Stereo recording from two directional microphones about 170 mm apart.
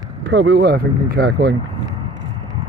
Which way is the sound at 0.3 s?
90° right.